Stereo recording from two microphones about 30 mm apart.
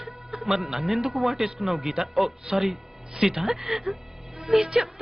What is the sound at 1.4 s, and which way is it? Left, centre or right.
Speech, centre.